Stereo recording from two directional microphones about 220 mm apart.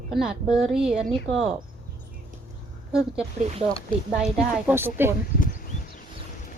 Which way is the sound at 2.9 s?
5° right (ahead or behind).